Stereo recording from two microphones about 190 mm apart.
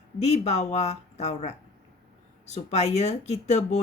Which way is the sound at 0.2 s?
35° left (ahead or behind).